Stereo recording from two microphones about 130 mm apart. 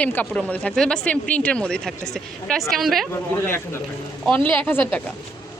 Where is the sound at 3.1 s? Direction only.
20° left (ahead or behind).